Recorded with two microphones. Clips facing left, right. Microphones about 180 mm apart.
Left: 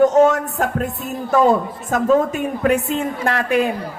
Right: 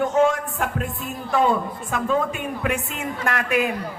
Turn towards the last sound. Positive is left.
turn(degrees=30)  # may be behind; listen again after turning